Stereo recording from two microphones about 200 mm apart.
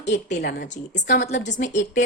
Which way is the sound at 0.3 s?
55° left (ahead or behind).